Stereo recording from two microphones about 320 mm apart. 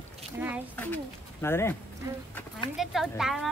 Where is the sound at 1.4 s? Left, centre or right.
Centre.